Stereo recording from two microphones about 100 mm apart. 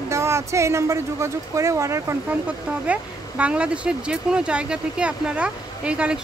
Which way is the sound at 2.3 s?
15° right (ahead or behind).